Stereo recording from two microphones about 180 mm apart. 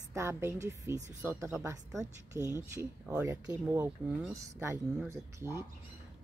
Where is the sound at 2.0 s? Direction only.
15° right (ahead or behind).